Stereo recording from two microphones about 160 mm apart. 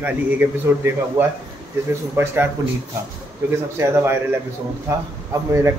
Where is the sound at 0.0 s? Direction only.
10° right (ahead or behind).